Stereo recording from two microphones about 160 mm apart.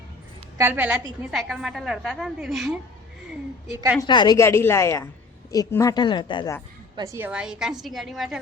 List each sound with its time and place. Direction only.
0.6 s a woman's voice: 10° right (ahead or behind)
4.0 s a woman's voice: 30° left (ahead or behind)
6.9 s a woman's voice: 20° right (ahead or behind); by 8.4 s centre (ahead or behind)